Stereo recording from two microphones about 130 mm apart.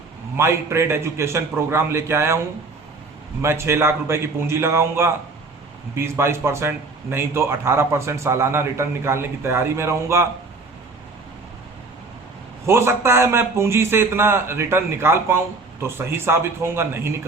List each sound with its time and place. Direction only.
0.3 s speech: 20° right (ahead or behind)
3.4 s speech: 20° right (ahead or behind)
12.6 s speech: 20° right (ahead or behind)